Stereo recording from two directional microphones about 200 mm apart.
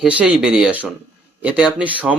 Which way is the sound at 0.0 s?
5° right (ahead or behind).